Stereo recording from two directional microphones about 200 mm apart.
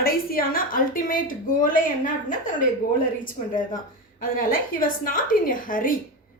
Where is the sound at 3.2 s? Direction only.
40° left (ahead or behind).